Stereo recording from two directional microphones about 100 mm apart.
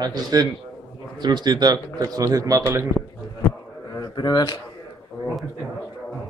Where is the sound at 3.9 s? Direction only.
45° left (ahead or behind).